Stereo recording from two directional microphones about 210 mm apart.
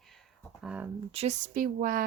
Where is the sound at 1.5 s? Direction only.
40° right (ahead or behind).